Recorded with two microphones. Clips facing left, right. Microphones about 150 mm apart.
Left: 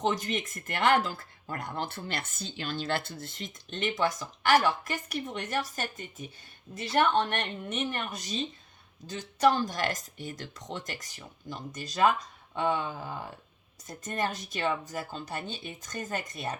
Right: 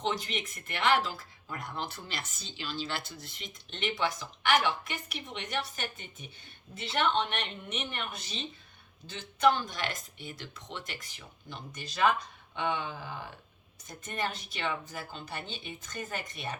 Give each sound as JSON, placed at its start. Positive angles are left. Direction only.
{"t": 0.0, "sound": "a woman's voice", "side_deg": 45}